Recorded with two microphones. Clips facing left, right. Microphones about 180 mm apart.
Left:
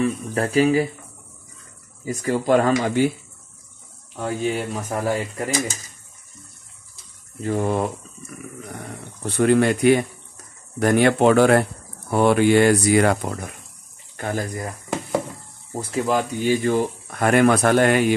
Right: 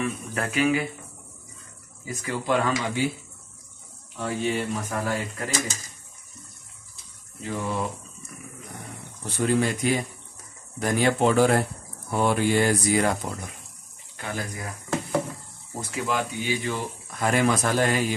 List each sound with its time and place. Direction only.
0.0 s speech: 35° left (ahead or behind)
2.0 s speech: 40° left (ahead or behind)
4.2 s speech: 40° left (ahead or behind)
7.4 s speech: 50° left (ahead or behind)
9.2 s speech: 60° left (ahead or behind)
14.1 s speech: 45° left (ahead or behind)
15.8 s speech: 35° left (ahead or behind); by 18.1 s 65° left (ahead or behind)